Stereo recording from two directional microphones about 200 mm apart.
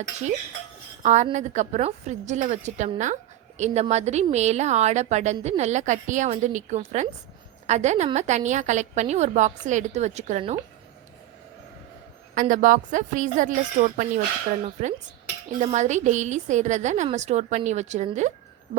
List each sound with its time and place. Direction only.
1.0 s speech: 35° right (ahead or behind)
12.3 s speech: 40° right (ahead or behind)